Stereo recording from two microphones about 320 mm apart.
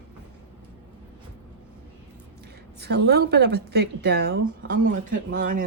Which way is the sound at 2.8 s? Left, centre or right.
Right.